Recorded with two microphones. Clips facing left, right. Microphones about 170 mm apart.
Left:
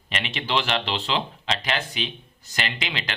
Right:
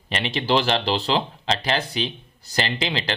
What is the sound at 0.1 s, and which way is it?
Speech, 35° right (ahead or behind).